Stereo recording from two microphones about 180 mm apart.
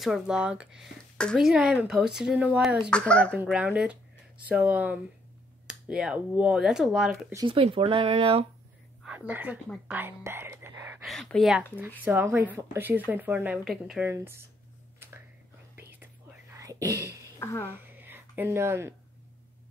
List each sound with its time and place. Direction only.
0.0 s speech: centre (ahead or behind)
3.3 s speech: 5° right (ahead or behind)
7.3 s speech: 30° right (ahead or behind)
9.0 s speech: 10° right (ahead or behind)
11.1 s speech: centre (ahead or behind)
12.0 s speech: 10° right (ahead or behind)
15.9 s whispering: 10° right (ahead or behind)
17.4 s a woman's voice: 15° left (ahead or behind)
17.7 s a sound: 10° right (ahead or behind)